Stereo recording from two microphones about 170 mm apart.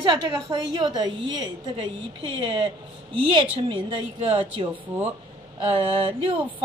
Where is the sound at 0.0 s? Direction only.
25° right (ahead or behind).